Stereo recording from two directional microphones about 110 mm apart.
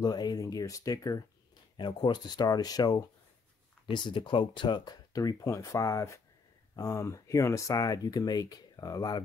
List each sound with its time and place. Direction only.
0.0 s speech: 40° left (ahead or behind)
1.8 s speech: 45° left (ahead or behind)
3.8 s speech: 45° left (ahead or behind)